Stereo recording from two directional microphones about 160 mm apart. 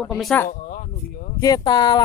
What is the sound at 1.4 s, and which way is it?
Speech, 25° left (ahead or behind).